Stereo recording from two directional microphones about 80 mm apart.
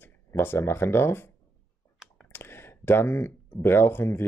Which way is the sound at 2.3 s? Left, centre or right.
Left.